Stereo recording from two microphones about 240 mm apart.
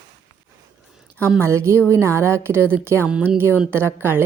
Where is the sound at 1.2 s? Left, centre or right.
Centre.